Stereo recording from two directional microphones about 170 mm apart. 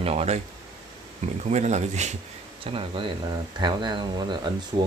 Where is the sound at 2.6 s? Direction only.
30° right (ahead or behind).